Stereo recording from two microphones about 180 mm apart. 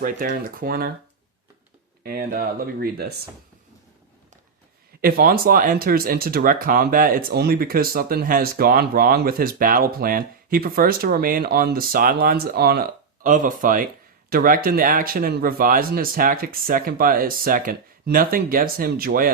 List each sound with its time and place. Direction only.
0.0 s speech: 50° right (ahead or behind)
2.0 s speech: 55° right (ahead or behind)
4.9 s speech: 55° right (ahead or behind)
13.2 s speech: 45° right (ahead or behind)